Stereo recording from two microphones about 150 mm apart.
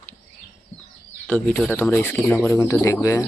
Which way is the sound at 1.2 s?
10° left (ahead or behind).